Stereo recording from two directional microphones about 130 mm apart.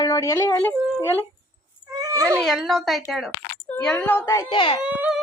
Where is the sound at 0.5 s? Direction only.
15° left (ahead or behind).